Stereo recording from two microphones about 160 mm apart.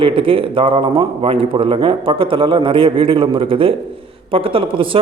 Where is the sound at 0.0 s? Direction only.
35° right (ahead or behind).